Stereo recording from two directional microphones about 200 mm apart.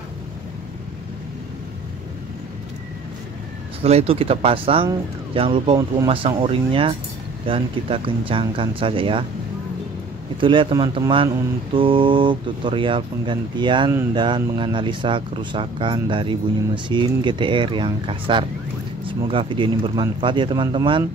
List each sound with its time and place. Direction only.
3.8 s speech: 30° right (ahead or behind)
10.3 s speech: 25° right (ahead or behind)